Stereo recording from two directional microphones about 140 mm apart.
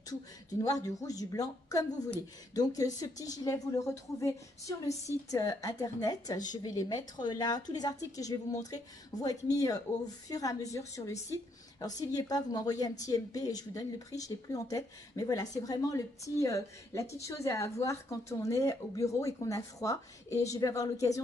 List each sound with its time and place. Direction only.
0.5 s speech: 25° left (ahead or behind)